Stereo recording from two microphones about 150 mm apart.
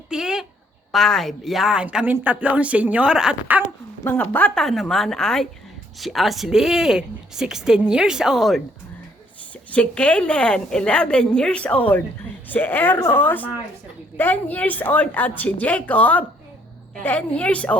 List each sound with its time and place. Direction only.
0.1 s a sound: 5° right (ahead or behind)
0.9 s speech: 5° left (ahead or behind)
4.0 s speech: 15° left (ahead or behind)
9.7 s a woman's voice: 10° left (ahead or behind)